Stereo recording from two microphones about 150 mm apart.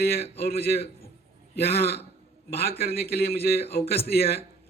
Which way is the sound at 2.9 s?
90° left.